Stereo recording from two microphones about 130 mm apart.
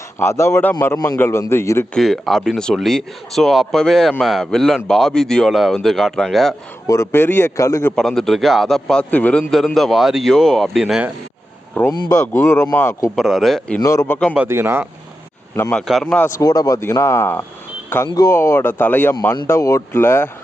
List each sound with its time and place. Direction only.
0.2 s a man's voice: 20° left (ahead or behind)
2.0 s a man's voice: centre (ahead or behind)
6.8 s a man's voice: 25° left (ahead or behind)
7.9 s a man's voice: 5° left (ahead or behind)
11.7 s speech: 10° left (ahead or behind)
11.9 s a man's voice: 25° left (ahead or behind)
13.1 s a man's voice: centre (ahead or behind)
13.8 s a man's voice: 25° left (ahead or behind)
14.3 s speech: 20° right (ahead or behind)
15.7 s a man's voice: centre (ahead or behind)
16.4 s a man's voice: 30° left (ahead or behind)